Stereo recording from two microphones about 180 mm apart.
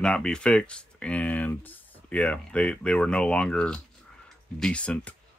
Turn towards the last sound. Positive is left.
turn(degrees=5)  # may be behind; listen again after turning